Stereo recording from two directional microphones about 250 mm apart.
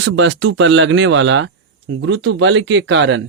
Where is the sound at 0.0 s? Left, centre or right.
Right.